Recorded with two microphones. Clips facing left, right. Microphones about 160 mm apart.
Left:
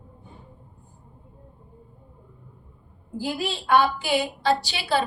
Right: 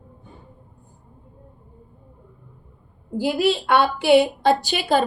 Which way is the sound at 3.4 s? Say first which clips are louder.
Right 2 dB; 75° right (ahead or behind).